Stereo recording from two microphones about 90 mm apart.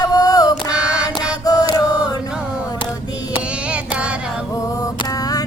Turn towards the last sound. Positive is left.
turn(degrees=-15)  # may be behind; listen again after turning